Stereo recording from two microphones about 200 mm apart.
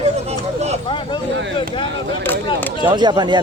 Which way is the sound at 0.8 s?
25° left (ahead or behind).